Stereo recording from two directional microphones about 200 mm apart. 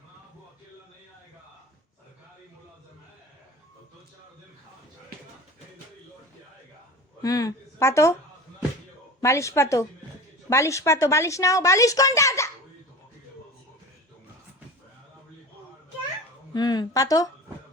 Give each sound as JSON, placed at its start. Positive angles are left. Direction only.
{"t": 7.2, "sound": "a woman's voice", "side_deg": 15}
{"t": 9.2, "sound": "a woman's voice", "side_deg": 15}
{"t": 16.6, "sound": "a woman's voice", "side_deg": 20}